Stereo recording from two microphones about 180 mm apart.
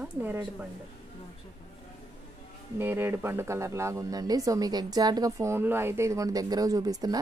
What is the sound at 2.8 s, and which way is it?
Speech, 10° right (ahead or behind).